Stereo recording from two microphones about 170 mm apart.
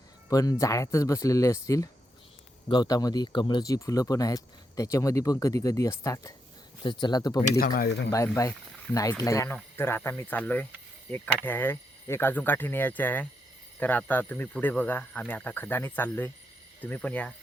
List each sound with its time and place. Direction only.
0.3 s speech: 20° left (ahead or behind)
7.6 s speech: 60° left (ahead or behind)
8.1 s speech: 15° left (ahead or behind)